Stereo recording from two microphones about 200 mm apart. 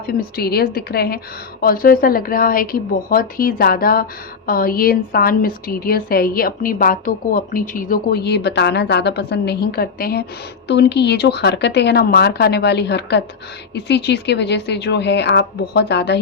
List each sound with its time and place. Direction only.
0.3 s a woman's voice: 50° left (ahead or behind)